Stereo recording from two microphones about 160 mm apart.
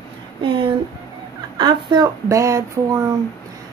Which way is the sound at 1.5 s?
25° right (ahead or behind).